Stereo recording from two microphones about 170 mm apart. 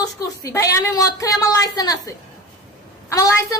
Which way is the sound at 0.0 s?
20° left (ahead or behind).